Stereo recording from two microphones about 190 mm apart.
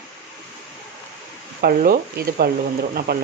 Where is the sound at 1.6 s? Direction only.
50° right (ahead or behind).